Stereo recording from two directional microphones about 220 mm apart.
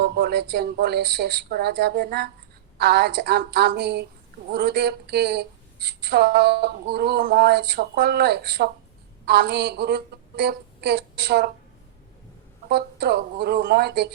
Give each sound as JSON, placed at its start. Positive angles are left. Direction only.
{"t": 0.0, "sound": "a woman's voice", "side_deg": -50}
{"t": 12.6, "sound": "a woman's voice", "side_deg": -45}